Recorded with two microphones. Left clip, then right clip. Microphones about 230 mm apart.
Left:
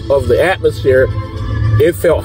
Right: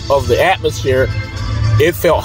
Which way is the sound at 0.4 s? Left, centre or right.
Centre.